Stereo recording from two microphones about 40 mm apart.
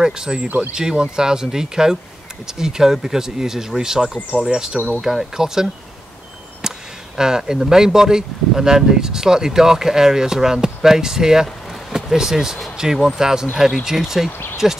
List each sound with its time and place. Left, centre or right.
0.0 s speech: centre
4.3 s speech: right
5.0 s speech: centre
6.6 s a sound: centre
7.2 s speech: centre